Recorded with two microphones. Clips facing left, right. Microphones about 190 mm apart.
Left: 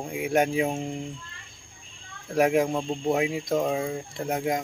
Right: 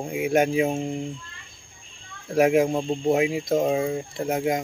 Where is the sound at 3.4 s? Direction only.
20° right (ahead or behind); by 4.6 s 5° right (ahead or behind).